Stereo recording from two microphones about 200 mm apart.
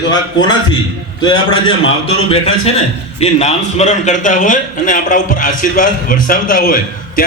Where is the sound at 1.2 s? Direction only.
25° left (ahead or behind).